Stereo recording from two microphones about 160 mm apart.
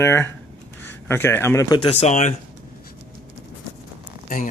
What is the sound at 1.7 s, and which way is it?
Speech, 40° left (ahead or behind).